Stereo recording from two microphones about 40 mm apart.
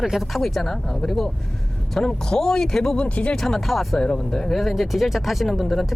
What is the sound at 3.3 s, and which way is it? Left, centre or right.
Speech, centre.